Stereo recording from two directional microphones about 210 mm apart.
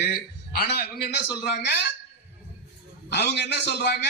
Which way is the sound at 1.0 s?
50° left (ahead or behind).